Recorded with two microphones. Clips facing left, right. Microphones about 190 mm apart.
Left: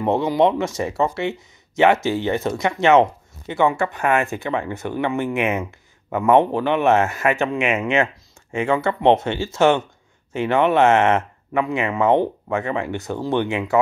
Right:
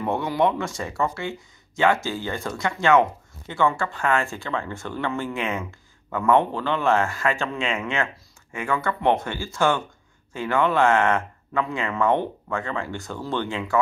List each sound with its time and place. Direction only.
0.0 s speech: 20° left (ahead or behind)